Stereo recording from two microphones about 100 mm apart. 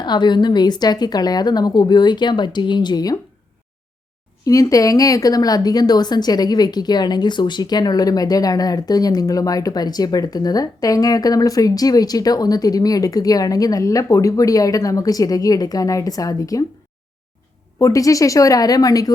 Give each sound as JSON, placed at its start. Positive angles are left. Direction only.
{"t": 0.0, "sound": "a woman's voice", "side_deg": 50}
{"t": 4.4, "sound": "speech", "side_deg": 35}
{"t": 17.7, "sound": "speech", "side_deg": 35}